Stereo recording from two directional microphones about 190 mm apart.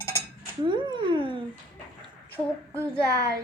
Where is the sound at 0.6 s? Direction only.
25° right (ahead or behind).